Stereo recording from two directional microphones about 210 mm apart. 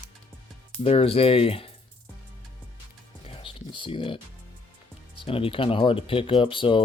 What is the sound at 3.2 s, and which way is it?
Music, 25° left (ahead or behind).